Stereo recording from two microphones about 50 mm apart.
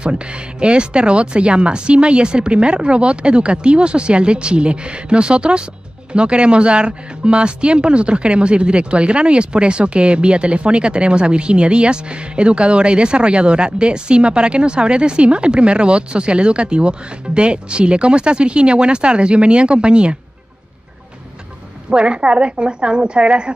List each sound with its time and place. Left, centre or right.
0.0 s speech: right
21.9 s speech: right